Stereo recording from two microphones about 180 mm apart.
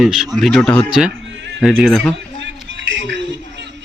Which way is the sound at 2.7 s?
90° right.